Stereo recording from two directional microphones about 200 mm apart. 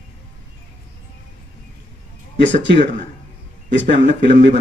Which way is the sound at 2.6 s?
65° right (ahead or behind).